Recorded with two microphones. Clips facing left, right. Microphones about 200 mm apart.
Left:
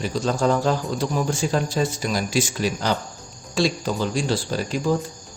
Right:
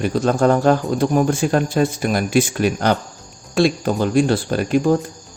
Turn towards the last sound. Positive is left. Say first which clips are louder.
# right 6 dB
turn(degrees=-55)  # may be behind; listen again after turning